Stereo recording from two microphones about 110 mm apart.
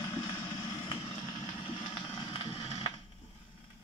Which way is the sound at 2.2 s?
35° left (ahead or behind).